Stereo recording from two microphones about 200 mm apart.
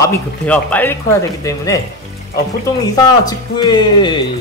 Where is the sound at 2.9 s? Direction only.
20° left (ahead or behind).